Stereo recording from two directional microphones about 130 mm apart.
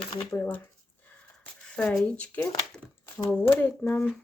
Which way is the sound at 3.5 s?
15° left (ahead or behind).